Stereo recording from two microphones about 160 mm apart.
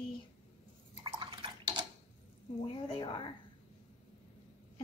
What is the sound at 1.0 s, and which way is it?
Drip, 30° right (ahead or behind).